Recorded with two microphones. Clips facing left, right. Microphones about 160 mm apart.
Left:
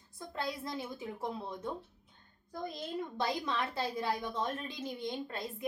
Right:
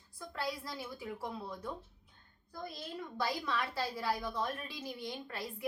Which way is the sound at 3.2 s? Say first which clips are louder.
Even; 20° left (ahead or behind).